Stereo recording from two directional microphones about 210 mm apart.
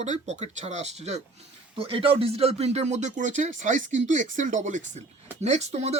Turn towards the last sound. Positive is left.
turn(degrees=-30)  # may be behind; listen again after turning